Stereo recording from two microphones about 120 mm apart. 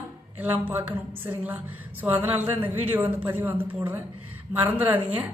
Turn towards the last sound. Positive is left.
turn(degrees=-15)  # may be behind; listen again after turning